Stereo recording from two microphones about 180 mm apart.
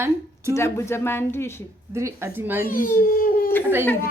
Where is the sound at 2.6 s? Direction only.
50° left (ahead or behind).